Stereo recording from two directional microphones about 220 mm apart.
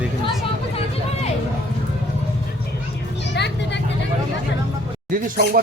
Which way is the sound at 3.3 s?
50° left (ahead or behind).